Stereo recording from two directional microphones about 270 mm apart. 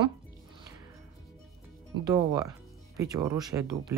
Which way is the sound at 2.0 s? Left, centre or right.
Centre.